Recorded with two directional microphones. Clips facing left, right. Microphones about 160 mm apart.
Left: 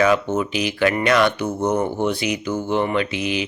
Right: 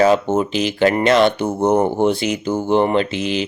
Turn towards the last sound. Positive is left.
turn(degrees=-30)  # may be behind; listen again after turning